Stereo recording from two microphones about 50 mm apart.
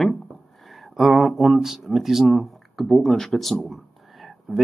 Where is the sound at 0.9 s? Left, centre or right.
Centre.